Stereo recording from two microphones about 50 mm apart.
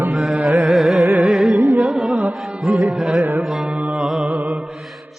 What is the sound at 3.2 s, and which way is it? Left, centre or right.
Music, right.